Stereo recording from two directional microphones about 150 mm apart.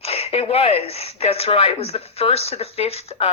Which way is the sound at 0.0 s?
40° left (ahead or behind).